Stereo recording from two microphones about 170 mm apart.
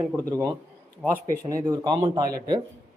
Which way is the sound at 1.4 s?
25° right (ahead or behind).